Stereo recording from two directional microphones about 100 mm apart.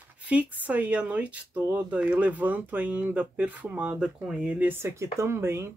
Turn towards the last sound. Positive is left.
turn(degrees=-25)  # may be behind; listen again after turning